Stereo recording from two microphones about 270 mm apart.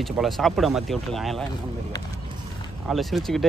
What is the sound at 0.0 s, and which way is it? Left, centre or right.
Speech, centre.